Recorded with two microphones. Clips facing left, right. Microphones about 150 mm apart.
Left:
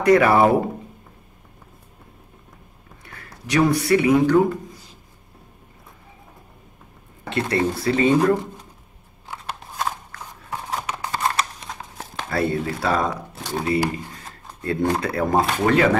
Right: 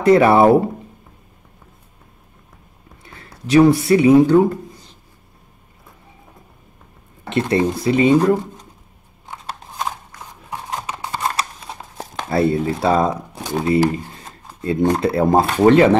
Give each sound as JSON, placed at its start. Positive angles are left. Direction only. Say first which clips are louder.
{"t": 0.0, "sound": "speech", "louder": "right 3 dB", "side_deg": -25}
{"t": 3.1, "sound": "speech", "louder": "right 8 dB", "side_deg": -25}
{"t": 7.2, "sound": "speech", "louder": "right 4 dB", "side_deg": -20}
{"t": 9.3, "sound": "scissors", "louder": "right 1 dB", "side_deg": -15}
{"t": 12.3, "sound": "speech", "louder": "right 5 dB", "side_deg": -25}